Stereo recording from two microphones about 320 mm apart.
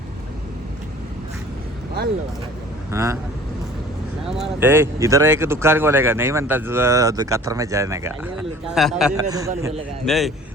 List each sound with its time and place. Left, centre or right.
2.0 s speech: right
2.9 s speech: centre
4.4 s a man's voice: centre